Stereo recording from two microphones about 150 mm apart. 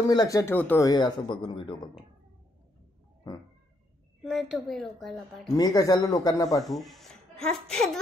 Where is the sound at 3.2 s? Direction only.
25° left (ahead or behind).